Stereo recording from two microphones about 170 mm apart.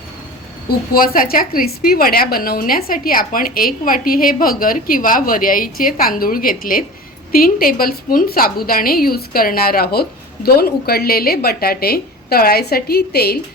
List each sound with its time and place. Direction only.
0.9 s a woman's voice: 55° left (ahead or behind)